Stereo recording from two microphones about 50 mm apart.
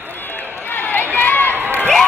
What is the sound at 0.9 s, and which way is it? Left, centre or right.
Run, left.